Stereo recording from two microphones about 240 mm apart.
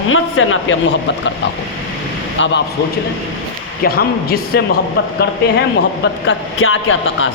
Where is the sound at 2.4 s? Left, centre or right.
Left.